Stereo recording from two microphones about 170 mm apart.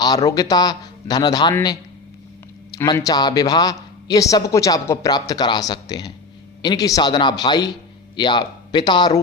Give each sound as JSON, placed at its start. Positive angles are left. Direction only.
{"t": 0.0, "sound": "a man's voice", "side_deg": 20}
{"t": 2.7, "sound": "a man's voice", "side_deg": 20}